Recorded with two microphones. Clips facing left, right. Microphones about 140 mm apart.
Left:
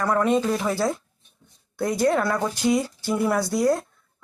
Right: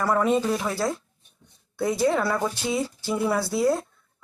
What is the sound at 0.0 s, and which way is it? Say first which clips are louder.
Speech: left 1 dB; 5° right (ahead or behind).